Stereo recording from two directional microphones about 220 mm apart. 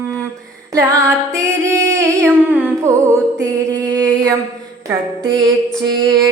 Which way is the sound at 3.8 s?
5° left (ahead or behind).